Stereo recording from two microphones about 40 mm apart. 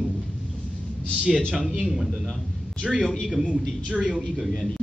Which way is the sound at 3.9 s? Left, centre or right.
Right.